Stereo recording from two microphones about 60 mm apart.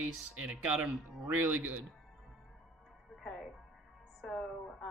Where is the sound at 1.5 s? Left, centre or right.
Right.